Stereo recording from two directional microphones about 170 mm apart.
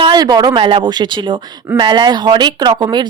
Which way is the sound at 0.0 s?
25° right (ahead or behind).